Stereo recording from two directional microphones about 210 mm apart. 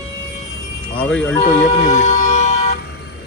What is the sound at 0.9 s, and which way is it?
Speech, 5° left (ahead or behind).